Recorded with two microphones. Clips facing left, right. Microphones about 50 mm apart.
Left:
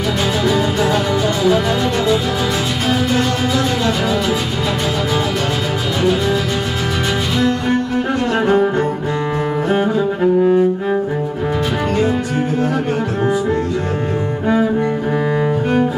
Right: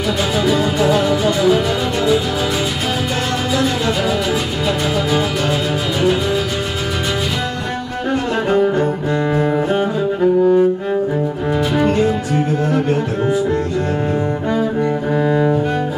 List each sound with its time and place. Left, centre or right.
0.5 s music: centre
0.9 s music: centre
8.5 s music: centre
9.7 s cello: centre
15.2 s cello: centre